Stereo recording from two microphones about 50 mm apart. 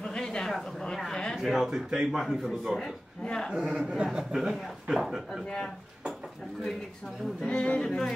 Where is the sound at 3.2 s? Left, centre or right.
Centre.